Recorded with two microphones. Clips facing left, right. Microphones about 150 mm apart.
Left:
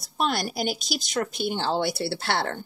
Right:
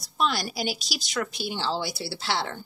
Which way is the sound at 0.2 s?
50° left (ahead or behind).